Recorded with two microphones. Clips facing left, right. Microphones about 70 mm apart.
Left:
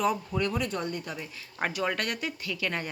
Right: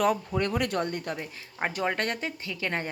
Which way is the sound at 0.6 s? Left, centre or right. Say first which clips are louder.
Right 3 dB; right.